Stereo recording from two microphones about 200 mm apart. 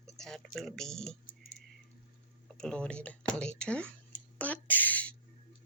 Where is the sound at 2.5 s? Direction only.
5° left (ahead or behind).